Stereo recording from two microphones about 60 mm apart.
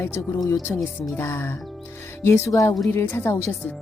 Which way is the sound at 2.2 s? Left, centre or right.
Left.